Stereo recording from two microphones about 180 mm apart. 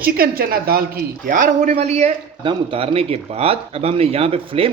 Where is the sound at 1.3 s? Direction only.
45° right (ahead or behind).